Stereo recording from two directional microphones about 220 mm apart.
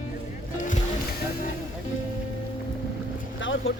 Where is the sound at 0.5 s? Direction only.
35° left (ahead or behind).